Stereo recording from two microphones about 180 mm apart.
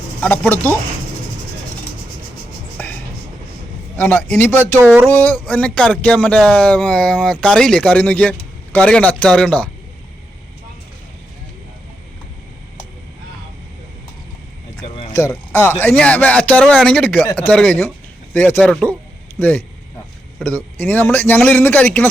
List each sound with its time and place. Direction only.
0.2 s speech: 10° left (ahead or behind)
2.8 s music: 10° left (ahead or behind)
3.9 s speech: 10° left (ahead or behind)
4.9 s speech: 5° right (ahead or behind)
5.1 s speech: 10° left (ahead or behind)
14.8 s a sound: 35° left (ahead or behind)
15.2 s speech: 10° left (ahead or behind)
20.7 s speech: 10° left (ahead or behind)